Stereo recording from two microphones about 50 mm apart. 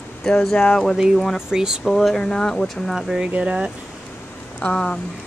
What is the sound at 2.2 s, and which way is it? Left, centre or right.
Speech, centre.